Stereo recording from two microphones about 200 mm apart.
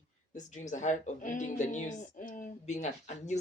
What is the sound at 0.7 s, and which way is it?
A woman's voice, 35° left (ahead or behind).